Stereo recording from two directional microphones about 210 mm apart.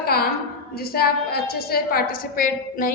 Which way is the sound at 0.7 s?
45° left (ahead or behind).